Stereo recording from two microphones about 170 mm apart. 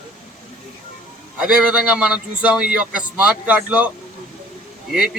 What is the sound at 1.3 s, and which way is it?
A man's voice, 5° right (ahead or behind).